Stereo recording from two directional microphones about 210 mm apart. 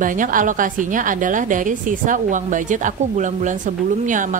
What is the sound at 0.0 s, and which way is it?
A woman's voice, 40° right (ahead or behind).